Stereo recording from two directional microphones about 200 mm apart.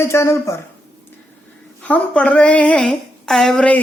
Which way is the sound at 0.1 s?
15° left (ahead or behind).